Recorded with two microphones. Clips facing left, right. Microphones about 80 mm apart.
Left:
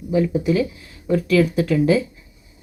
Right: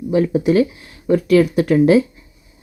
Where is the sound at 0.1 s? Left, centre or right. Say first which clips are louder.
Right 3 dB; right.